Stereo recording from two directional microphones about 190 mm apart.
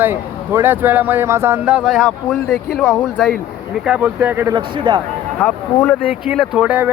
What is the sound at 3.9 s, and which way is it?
Speech, 10° right (ahead or behind).